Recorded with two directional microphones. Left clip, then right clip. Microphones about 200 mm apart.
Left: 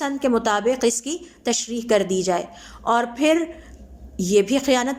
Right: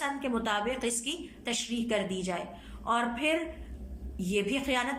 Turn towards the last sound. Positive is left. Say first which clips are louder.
# left 10 dB
turn(degrees=20)  # may be behind; listen again after turning